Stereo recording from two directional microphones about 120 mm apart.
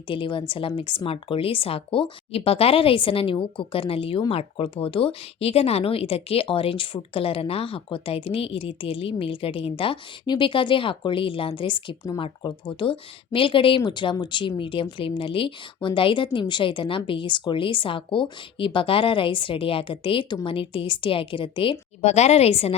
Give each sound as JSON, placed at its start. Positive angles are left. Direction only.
{"t": 0.1, "sound": "speech", "side_deg": 45}
{"t": 22.0, "sound": "a woman's voice", "side_deg": 65}